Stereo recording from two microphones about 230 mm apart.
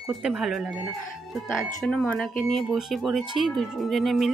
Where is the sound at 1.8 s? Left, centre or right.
Centre.